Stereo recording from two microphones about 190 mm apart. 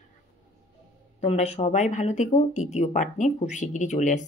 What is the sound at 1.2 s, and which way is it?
Speech, 35° left (ahead or behind).